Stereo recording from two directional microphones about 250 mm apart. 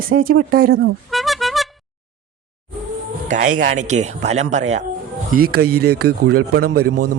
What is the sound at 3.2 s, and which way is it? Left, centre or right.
Speech, right.